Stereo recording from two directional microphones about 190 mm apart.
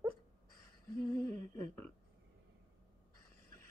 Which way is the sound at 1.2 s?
40° right (ahead or behind).